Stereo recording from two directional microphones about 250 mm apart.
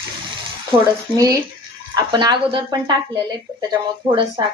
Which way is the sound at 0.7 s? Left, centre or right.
Right.